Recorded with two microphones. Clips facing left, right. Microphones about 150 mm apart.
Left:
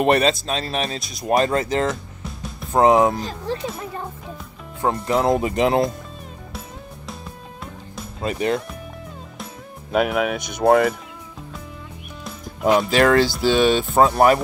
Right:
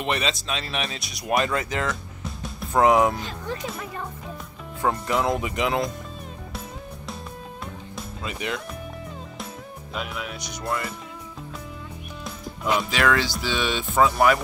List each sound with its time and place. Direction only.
0.0 s speech: 45° left (ahead or behind)
5.0 s speech: 30° left (ahead or behind)
8.2 s speech: 40° left (ahead or behind)
9.9 s speech: 65° left (ahead or behind)
12.6 s speech: 45° left (ahead or behind)